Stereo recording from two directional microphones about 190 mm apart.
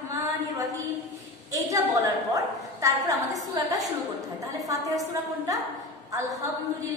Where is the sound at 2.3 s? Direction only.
15° right (ahead or behind).